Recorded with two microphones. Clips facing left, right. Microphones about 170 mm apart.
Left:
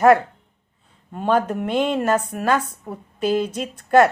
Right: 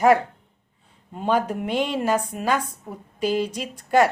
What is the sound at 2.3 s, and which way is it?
Speech, 65° left (ahead or behind).